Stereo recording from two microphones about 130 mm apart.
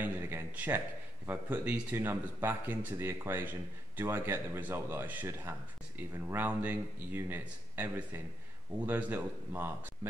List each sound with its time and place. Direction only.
0.0 s a man's voice: 15° right (ahead or behind)